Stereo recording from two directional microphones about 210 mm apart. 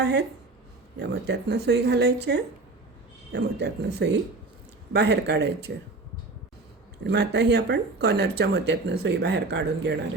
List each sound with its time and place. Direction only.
0.0 s speech: 55° right (ahead or behind)
7.0 s speech: 55° right (ahead or behind)